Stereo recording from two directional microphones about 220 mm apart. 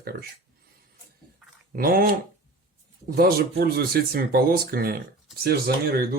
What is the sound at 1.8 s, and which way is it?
Speech, 40° right (ahead or behind).